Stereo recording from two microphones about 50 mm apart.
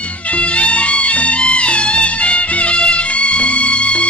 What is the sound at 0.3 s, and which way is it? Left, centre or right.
Music, left.